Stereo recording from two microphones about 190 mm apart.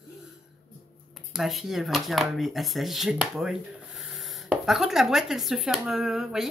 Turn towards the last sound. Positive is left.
turn(degrees=0)  # may be behind; listen again after turning